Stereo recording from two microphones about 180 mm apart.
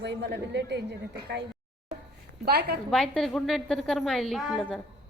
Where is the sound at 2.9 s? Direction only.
Centre (ahead or behind).